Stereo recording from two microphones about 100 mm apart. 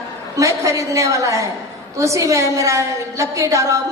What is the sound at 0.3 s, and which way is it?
A woman's voice, 30° right (ahead or behind).